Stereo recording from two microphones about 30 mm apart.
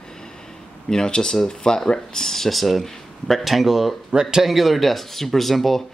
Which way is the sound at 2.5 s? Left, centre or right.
Centre.